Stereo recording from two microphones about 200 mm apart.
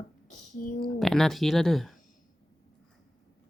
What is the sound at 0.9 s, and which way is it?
Speech, centre (ahead or behind).